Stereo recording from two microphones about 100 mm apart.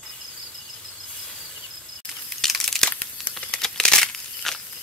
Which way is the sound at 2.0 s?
5° left (ahead or behind).